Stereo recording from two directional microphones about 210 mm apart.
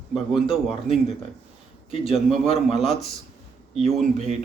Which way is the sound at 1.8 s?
25° left (ahead or behind).